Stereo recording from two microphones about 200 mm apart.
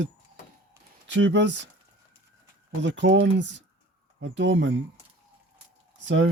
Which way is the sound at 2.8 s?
65° right (ahead or behind).